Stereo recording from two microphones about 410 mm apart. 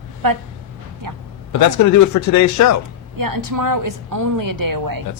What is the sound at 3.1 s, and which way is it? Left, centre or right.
A woman's voice, right.